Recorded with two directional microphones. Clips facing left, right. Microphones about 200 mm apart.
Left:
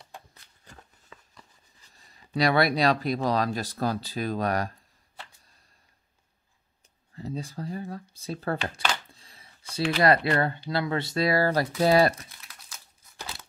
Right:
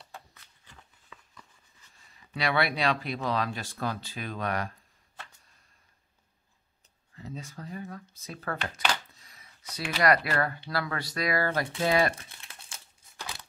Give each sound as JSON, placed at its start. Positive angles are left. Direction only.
{"t": 0.3, "sound": "a sound", "side_deg": 35}
{"t": 7.2, "sound": "speech", "side_deg": 35}
{"t": 12.2, "sound": "crumpling", "side_deg": -30}